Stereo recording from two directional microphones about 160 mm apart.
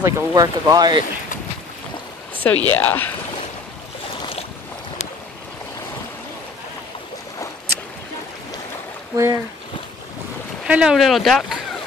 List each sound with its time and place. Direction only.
0.0 s speech: 20° right (ahead or behind)
2.3 s a sound: 10° left (ahead or behind)
2.7 s speech: 10° left (ahead or behind)
4.2 s boat: 35° left (ahead or behind)
9.1 s speech: 20° right (ahead or behind)
10.6 s speech: 5° right (ahead or behind)